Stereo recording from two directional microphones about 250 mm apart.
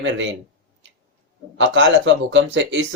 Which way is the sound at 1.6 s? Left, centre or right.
Right.